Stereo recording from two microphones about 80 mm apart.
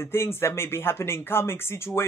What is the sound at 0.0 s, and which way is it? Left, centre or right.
Speech, left.